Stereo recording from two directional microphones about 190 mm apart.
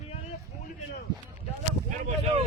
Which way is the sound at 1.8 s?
35° right (ahead or behind).